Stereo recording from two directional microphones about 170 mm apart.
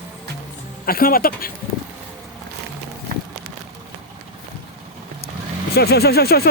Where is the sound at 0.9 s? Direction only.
60° left (ahead or behind).